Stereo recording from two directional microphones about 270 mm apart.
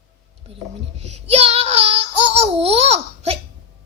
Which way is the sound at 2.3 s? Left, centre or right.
Right.